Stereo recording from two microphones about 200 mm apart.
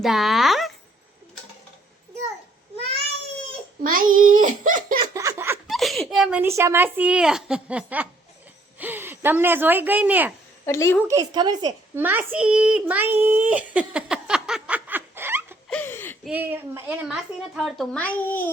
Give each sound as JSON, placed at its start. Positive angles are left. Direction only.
{"t": 0.0, "sound": "speech", "side_deg": 0}
{"t": 3.8, "sound": "a child's voice", "side_deg": -45}
{"t": 4.9, "sound": "a sound", "side_deg": -15}
{"t": 5.6, "sound": "speech", "side_deg": 0}
{"t": 10.7, "sound": "a woman's voice", "side_deg": 15}
{"t": 11.1, "sound": "a woman's voice", "side_deg": -20}
{"t": 15.7, "sound": "a sound", "side_deg": 10}
{"t": 16.2, "sound": "speech", "side_deg": -10}